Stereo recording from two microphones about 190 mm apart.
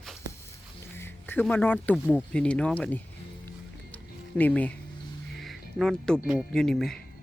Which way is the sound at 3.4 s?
10° left (ahead or behind).